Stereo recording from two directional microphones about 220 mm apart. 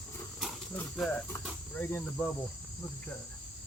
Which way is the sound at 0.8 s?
10° left (ahead or behind).